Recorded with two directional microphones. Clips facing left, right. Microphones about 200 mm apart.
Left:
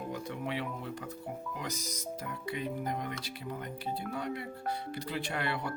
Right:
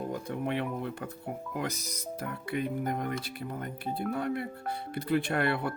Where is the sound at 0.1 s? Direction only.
50° right (ahead or behind).